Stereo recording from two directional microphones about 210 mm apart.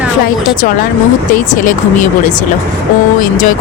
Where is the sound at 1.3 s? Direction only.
40° left (ahead or behind).